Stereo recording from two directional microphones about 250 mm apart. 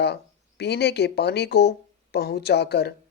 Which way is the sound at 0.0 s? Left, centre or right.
Left.